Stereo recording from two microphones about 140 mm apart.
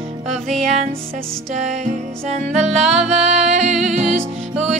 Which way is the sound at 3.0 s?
55° right (ahead or behind).